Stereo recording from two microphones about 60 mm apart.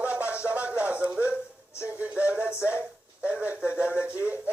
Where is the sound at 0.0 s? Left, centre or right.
Right.